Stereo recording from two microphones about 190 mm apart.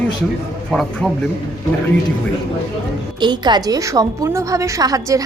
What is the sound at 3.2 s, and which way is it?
A woman's voice, 25° right (ahead or behind).